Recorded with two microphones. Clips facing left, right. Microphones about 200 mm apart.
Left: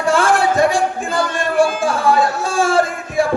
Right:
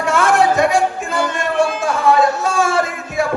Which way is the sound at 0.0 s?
30° left (ahead or behind).